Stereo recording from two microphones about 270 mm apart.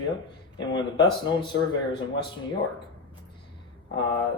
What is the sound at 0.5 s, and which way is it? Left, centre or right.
Speech, centre.